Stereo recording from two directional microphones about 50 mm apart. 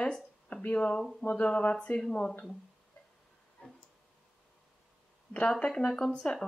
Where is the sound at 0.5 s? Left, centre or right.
Left.